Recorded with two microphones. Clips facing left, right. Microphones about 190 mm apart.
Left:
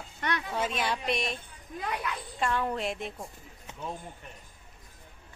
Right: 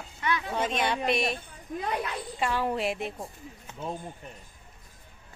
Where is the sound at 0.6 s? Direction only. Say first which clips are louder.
Right 3 dB; 5° left (ahead or behind).